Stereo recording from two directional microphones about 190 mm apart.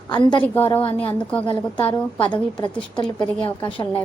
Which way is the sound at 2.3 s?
25° left (ahead or behind).